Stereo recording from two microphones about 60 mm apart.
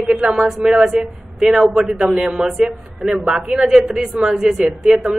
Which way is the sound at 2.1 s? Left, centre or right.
Centre.